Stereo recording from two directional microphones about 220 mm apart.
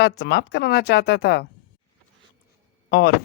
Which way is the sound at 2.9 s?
50° left (ahead or behind).